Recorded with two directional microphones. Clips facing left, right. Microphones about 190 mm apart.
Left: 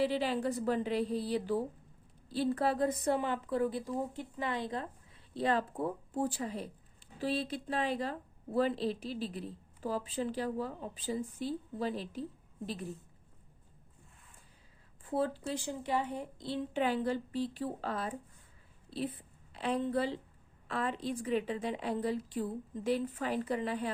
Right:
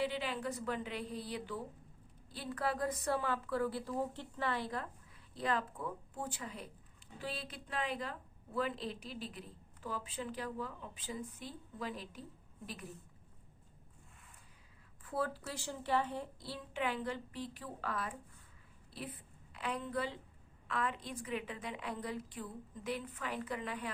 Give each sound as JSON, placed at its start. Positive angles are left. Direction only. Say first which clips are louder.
{"t": 0.0, "sound": "a woman's voice", "louder": "left 6 dB", "side_deg": 35}
{"t": 15.0, "sound": "a child's voice", "louder": "left 5 dB", "side_deg": 25}